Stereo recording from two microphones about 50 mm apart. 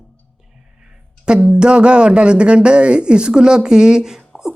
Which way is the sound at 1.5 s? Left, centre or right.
Centre.